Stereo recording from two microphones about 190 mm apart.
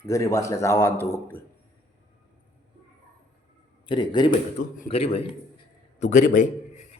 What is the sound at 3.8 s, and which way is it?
Speech, 25° left (ahead or behind).